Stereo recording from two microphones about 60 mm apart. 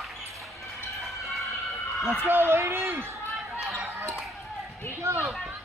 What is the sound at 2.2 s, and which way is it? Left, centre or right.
Speech, right.